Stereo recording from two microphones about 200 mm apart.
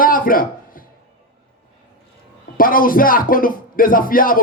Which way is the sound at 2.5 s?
45° left (ahead or behind).